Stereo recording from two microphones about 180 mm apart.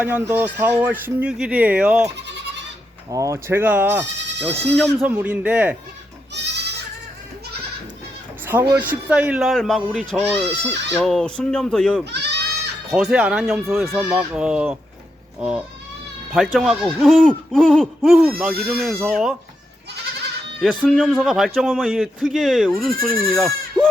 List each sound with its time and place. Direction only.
0.0 s speech: 10° right (ahead or behind)
2.1 s goat: 75° right (ahead or behind)
3.1 s speech: 20° right (ahead or behind)
4.4 s speech: 5° left (ahead or behind)
5.0 s speech: 10° right (ahead or behind)
6.3 s goat: 70° right (ahead or behind)
8.8 s speech: 10° right (ahead or behind)
12.1 s goat: 65° right (ahead or behind)
12.9 s speech: 5° right (ahead or behind)
20.6 s speech: centre (ahead or behind)